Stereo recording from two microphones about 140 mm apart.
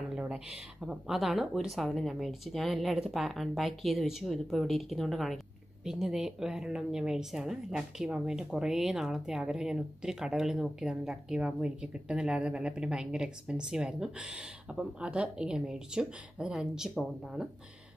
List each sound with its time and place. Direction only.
0.1 s speech: 5° right (ahead or behind)